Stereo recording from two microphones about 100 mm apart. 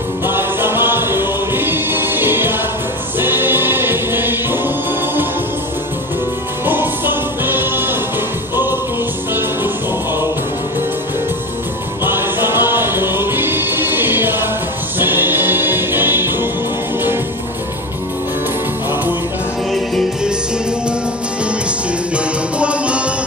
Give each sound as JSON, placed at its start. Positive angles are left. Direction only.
{"t": 0.3, "sound": "music", "side_deg": -20}
{"t": 6.6, "sound": "music", "side_deg": -20}
{"t": 12.0, "sound": "music", "side_deg": -25}
{"t": 22.1, "sound": "music", "side_deg": -10}